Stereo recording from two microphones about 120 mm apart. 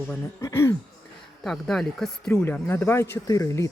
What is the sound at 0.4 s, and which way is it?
Speech, 25° left (ahead or behind).